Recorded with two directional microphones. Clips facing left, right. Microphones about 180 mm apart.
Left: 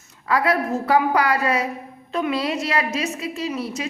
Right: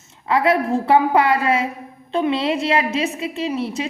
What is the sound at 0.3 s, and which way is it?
A woman's voice, 25° right (ahead or behind).